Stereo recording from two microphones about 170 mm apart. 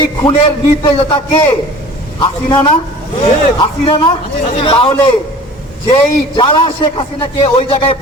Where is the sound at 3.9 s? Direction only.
30° left (ahead or behind).